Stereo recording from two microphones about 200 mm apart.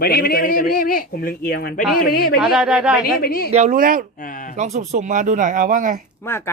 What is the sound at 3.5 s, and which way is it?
Speech, 40° right (ahead or behind).